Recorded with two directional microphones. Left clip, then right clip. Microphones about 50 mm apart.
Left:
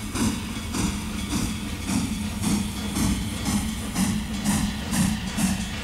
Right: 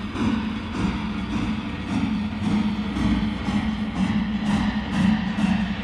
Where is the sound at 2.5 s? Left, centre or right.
Left.